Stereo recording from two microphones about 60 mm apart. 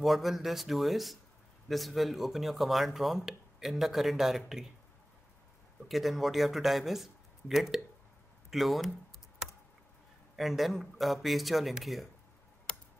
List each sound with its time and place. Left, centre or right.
0.0 s speech: centre
5.9 s speech: centre
10.3 s speech: centre
12.7 s a sound: centre